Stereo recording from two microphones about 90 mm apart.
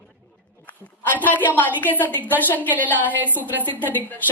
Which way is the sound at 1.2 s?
20° left (ahead or behind).